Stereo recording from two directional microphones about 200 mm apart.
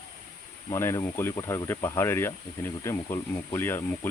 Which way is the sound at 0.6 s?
15° left (ahead or behind).